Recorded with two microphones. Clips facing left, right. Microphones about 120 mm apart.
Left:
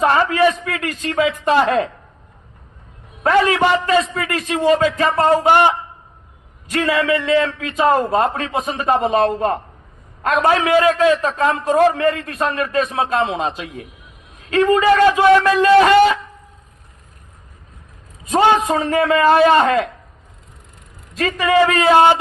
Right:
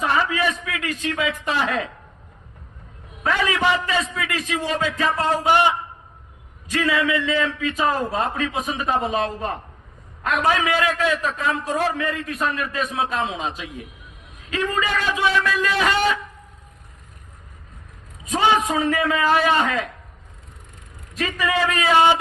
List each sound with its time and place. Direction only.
0.0 s a sound: 55° left (ahead or behind)
1.5 s a man's voice: 55° left (ahead or behind)
3.2 s a man's voice: 50° left (ahead or behind)
14.8 s speech: 55° left (ahead or behind)
18.3 s a man's voice: 55° left (ahead or behind)
21.2 s a man's voice: 60° left (ahead or behind)